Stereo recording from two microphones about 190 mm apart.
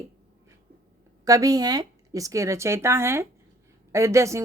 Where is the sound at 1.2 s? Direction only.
20° right (ahead or behind).